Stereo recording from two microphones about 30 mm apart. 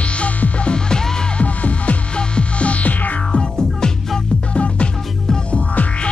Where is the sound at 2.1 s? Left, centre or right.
Left.